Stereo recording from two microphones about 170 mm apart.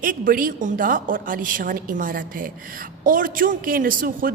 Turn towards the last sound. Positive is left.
turn(degrees=-55)  # may be behind; listen again after turning